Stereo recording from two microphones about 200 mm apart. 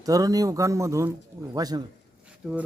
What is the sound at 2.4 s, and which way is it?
Speech, centre (ahead or behind).